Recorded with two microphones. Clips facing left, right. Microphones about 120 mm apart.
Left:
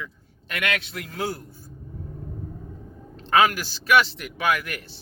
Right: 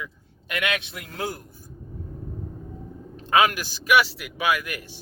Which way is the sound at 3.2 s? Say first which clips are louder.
Left 1 dB; 15° right (ahead or behind).